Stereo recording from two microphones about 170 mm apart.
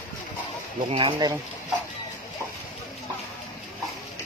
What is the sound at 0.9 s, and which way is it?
Speech, 30° right (ahead or behind).